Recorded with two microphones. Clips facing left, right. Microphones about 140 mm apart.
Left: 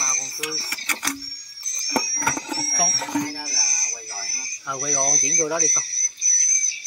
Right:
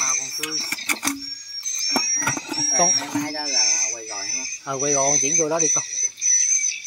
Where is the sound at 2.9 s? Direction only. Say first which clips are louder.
Even; 90° right.